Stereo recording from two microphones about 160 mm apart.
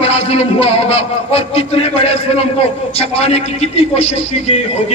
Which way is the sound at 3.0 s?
40° left (ahead or behind).